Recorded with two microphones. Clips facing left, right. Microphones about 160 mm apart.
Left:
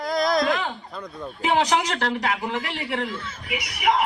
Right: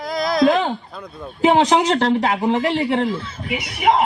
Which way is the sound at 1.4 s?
25° right (ahead or behind).